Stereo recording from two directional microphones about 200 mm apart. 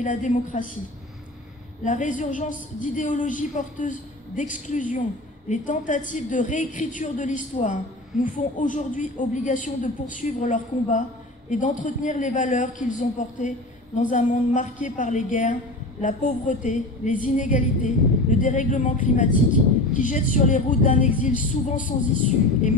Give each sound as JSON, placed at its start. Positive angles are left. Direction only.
{"t": 0.0, "sound": "a woman's voice", "side_deg": 40}
{"t": 1.9, "sound": "a woman's voice", "side_deg": 40}